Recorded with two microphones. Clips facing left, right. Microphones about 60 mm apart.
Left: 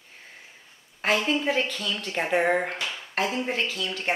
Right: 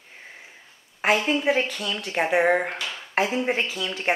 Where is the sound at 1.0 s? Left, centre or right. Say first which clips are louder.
Right 3 dB; centre.